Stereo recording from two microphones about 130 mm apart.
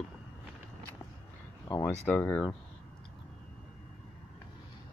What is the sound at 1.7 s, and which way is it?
Speech, 25° left (ahead or behind).